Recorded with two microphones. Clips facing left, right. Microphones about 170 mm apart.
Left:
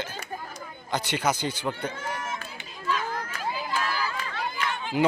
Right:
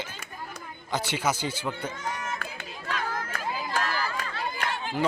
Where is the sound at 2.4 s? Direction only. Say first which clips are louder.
Left 2 dB; 60° right (ahead or behind).